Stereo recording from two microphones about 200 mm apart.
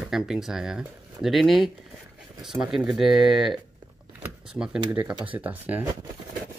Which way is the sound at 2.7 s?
Centre (ahead or behind).